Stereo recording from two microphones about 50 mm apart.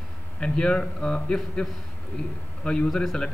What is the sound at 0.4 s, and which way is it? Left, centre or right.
A man's voice, centre.